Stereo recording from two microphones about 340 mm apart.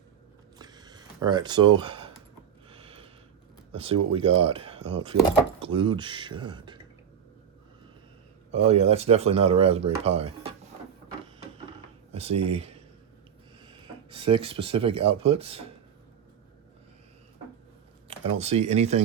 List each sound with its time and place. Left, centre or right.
0.6 s a sound: centre
3.7 s speech: centre
8.6 s speech: centre
12.1 s speech: centre
18.1 s speech: centre